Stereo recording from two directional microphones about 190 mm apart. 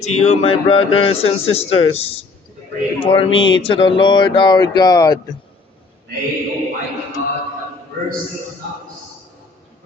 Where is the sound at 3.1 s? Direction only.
25° left (ahead or behind).